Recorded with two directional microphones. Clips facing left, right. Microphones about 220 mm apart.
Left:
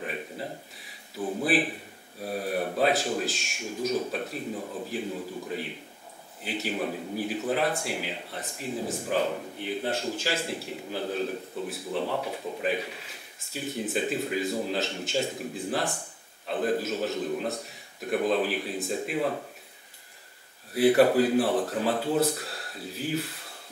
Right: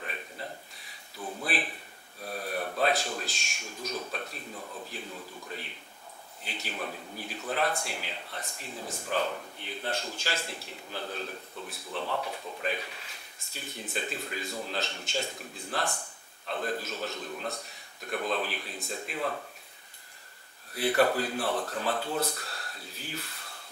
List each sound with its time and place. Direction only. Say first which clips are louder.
0.0 s a sound: left 6 dB; 10° left (ahead or behind)
1.1 s speech: left 8 dB; 30° left (ahead or behind)
1.4 s a man's voice: left 8 dB; 5° left (ahead or behind)
4.6 s a man's voice: left 7 dB; 25° left (ahead or behind)
4.8 s a man's voice: left 9 dB; 5° left (ahead or behind)
20.7 s a man's voice: left 6 dB; 5° left (ahead or behind)